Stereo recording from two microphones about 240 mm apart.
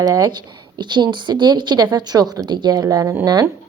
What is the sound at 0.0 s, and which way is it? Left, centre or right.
Speech, centre.